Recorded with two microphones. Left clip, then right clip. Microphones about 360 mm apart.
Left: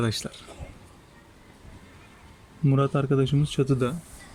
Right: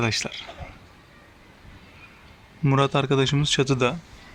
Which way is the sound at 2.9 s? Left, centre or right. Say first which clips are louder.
Right 4 dB; right.